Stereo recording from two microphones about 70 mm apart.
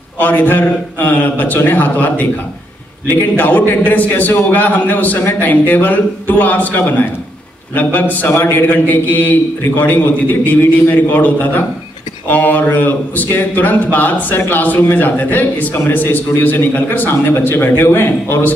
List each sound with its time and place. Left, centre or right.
0.2 s a man's voice: left